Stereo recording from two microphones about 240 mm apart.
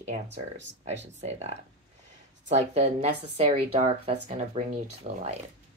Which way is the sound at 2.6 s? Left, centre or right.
Right.